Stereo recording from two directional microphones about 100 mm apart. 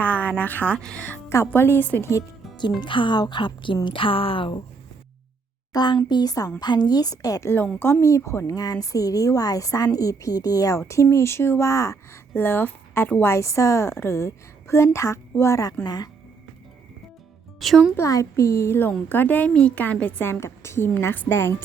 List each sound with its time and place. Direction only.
0.0 s a woman's voice: 15° left (ahead or behind)
2.8 s a woman's voice: 55° left (ahead or behind)
5.7 s a woman's voice: 45° left (ahead or behind)
7.8 s a woman's voice: 20° left (ahead or behind); by 16.0 s 40° left (ahead or behind)
17.6 s speech: centre (ahead or behind)
17.9 s a woman's voice: 30° left (ahead or behind)